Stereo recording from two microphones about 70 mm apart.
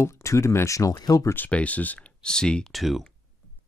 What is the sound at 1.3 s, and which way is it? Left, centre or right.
Speech, left.